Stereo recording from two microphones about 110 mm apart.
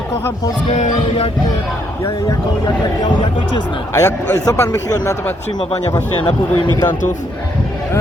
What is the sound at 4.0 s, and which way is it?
A man's voice, 30° left (ahead or behind).